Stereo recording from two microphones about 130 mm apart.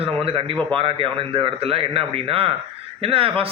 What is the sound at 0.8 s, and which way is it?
A man's voice, 45° right (ahead or behind).